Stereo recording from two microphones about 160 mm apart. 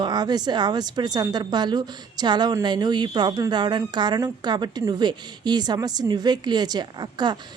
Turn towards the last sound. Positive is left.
turn(degrees=-25)  # may be behind; listen again after turning